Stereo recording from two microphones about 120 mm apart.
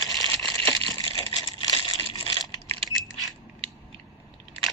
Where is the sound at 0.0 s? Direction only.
30° left (ahead or behind).